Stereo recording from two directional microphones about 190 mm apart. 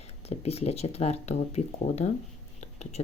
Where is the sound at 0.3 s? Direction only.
35° left (ahead or behind).